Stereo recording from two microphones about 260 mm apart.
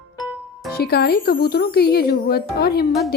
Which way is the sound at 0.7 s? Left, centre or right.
Left.